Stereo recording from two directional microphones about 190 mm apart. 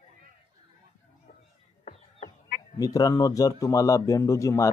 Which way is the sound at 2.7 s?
20° left (ahead or behind).